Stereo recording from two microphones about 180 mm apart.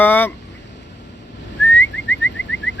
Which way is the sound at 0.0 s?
10° left (ahead or behind).